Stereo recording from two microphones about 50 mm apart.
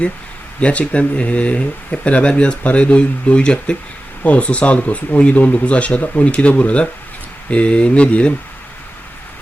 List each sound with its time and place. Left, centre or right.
0.6 s speech: left